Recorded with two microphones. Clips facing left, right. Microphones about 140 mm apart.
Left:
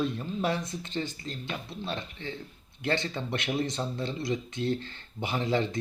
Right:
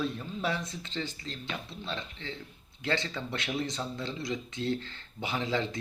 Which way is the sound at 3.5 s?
50° left (ahead or behind).